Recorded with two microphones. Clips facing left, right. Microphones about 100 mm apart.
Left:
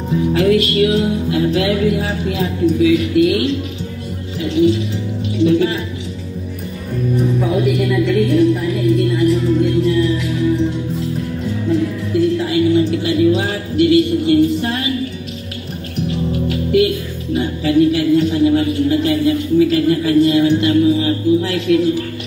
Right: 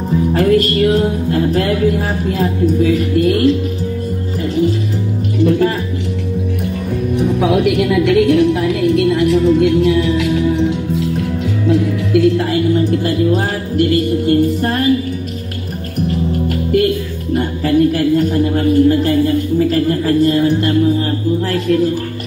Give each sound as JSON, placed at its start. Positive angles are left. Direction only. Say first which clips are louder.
{"t": 0.3, "sound": "music", "louder": "right 1 dB", "side_deg": -45}
{"t": 7.2, "sound": "music", "louder": "right 3 dB", "side_deg": -75}
{"t": 12.4, "sound": "music", "louder": "even", "side_deg": -45}
{"t": 16.1, "sound": "music", "louder": "right 1 dB", "side_deg": -50}